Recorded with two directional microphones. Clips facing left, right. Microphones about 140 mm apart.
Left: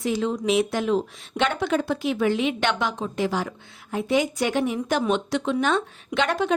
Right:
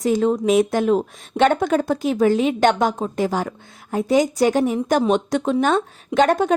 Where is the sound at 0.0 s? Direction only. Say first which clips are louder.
Right 6 dB; 45° right (ahead or behind).